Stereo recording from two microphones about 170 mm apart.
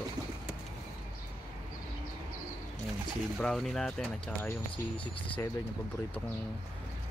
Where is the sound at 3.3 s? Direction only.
Centre (ahead or behind).